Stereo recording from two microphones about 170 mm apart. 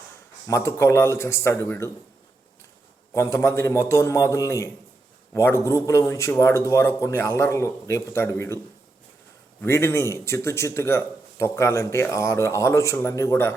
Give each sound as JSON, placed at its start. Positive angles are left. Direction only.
{"t": 0.4, "sound": "a man's voice", "side_deg": 15}
{"t": 3.2, "sound": "a man's voice", "side_deg": 15}
{"t": 9.6, "sound": "a man's voice", "side_deg": 15}